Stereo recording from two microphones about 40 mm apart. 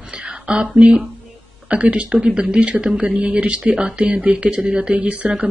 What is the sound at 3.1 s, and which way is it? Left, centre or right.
Speech, right.